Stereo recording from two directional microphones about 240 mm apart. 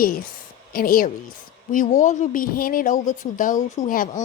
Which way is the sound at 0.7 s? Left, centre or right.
Left.